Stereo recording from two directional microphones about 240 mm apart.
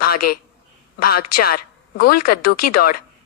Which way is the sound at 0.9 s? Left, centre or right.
Left.